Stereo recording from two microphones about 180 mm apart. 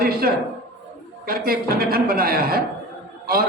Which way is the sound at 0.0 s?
55° right (ahead or behind).